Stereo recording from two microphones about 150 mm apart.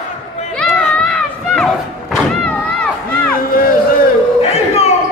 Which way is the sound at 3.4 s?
75° left (ahead or behind).